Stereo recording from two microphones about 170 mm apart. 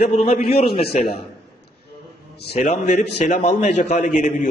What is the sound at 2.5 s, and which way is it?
A man's voice, 40° left (ahead or behind).